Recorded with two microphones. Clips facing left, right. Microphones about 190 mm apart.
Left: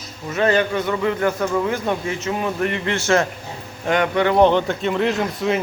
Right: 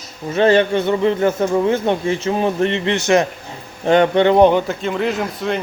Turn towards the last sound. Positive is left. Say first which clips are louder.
# even
turn(degrees=0)  # may be behind; listen again after turning